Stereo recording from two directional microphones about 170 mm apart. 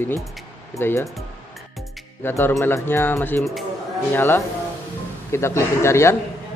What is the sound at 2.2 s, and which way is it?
Speech, 15° left (ahead or behind).